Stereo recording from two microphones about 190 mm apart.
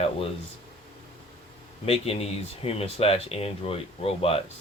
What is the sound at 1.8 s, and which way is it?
Speech, 30° left (ahead or behind).